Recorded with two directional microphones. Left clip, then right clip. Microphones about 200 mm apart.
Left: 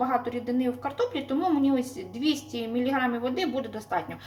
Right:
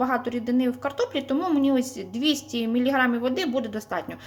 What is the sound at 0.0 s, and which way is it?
A woman's voice, 50° right (ahead or behind).